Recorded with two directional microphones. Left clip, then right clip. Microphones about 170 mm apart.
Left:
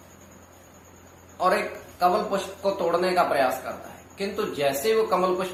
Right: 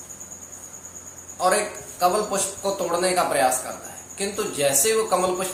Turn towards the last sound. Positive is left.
turn(degrees=0)  # may be behind; listen again after turning